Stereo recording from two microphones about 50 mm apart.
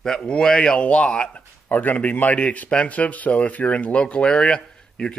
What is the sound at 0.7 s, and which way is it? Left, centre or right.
Speech, left.